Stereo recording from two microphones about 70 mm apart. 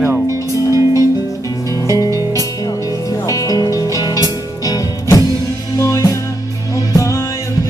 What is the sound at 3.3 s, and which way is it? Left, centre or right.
Music, left.